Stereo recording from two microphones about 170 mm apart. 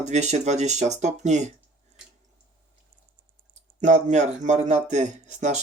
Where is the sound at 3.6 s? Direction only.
45° right (ahead or behind).